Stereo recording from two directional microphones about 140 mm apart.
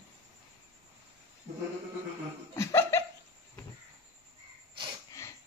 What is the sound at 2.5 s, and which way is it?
Laughter, 20° left (ahead or behind).